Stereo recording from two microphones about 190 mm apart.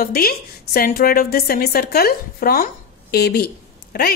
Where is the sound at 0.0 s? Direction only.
50° left (ahead or behind).